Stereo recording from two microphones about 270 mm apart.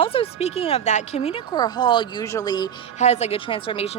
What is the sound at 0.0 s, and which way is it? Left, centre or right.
Speech, left.